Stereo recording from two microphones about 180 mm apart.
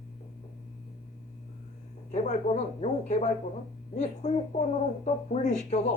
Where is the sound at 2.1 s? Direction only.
40° left (ahead or behind).